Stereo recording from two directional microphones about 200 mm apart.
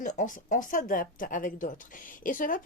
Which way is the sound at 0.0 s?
40° left (ahead or behind).